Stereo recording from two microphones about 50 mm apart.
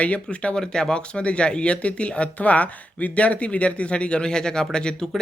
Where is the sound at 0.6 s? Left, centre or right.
Centre.